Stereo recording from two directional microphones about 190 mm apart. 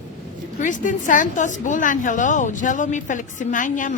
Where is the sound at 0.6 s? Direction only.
40° left (ahead or behind).